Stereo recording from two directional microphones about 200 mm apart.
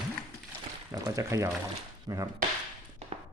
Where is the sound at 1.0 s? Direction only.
15° right (ahead or behind).